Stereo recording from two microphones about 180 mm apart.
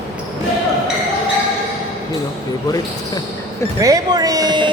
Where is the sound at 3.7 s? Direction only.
20° right (ahead or behind).